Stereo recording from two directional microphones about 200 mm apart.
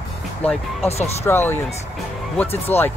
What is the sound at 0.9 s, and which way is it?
Speech, 30° left (ahead or behind).